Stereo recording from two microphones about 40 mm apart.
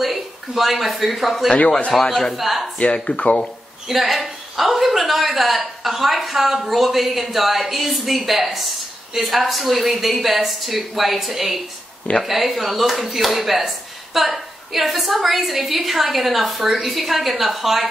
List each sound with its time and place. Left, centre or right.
0.0 s a man's voice: centre
2.3 s speech: centre
2.8 s speech: left
3.9 s speech: centre